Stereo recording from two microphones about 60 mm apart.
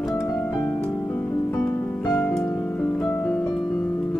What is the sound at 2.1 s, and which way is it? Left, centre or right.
Music, left.